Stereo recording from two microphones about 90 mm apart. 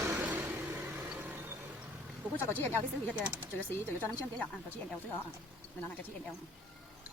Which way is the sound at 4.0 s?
15° left (ahead or behind).